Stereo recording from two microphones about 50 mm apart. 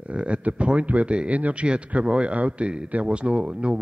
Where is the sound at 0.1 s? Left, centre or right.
Right.